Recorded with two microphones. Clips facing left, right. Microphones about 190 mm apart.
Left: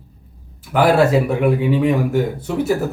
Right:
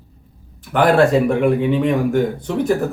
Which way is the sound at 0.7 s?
5° left (ahead or behind).